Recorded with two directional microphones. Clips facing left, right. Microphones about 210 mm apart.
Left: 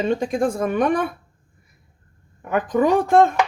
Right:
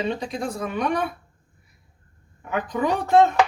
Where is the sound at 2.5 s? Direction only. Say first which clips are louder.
Left 6 dB; 50° left (ahead or behind).